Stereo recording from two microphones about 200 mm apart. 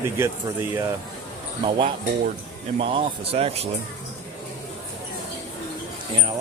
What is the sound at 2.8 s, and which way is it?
Speech, 25° right (ahead or behind).